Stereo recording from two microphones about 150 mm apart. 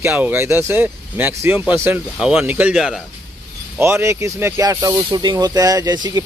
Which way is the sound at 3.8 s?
15° right (ahead or behind).